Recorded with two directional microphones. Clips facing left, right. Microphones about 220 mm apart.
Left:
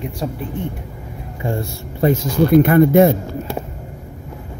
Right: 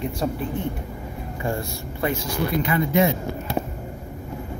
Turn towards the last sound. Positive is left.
turn(degrees=50)  # may be behind; listen again after turning